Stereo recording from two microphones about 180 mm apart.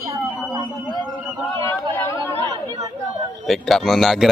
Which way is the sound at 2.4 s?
20° right (ahead or behind).